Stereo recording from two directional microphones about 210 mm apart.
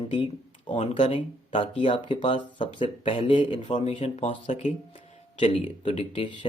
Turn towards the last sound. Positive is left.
turn(degrees=25)  # may be behind; listen again after turning